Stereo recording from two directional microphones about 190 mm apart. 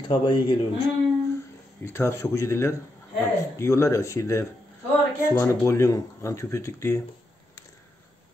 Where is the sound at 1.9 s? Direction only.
15° left (ahead or behind).